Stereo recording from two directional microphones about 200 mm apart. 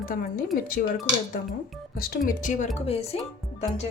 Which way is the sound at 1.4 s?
45° left (ahead or behind).